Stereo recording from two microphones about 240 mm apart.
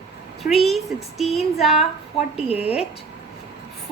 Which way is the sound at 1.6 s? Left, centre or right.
Left.